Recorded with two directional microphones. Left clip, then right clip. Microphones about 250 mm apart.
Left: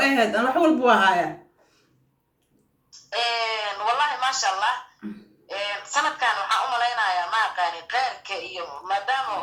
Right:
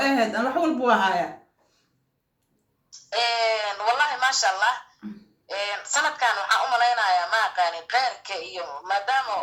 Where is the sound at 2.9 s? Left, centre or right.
Centre.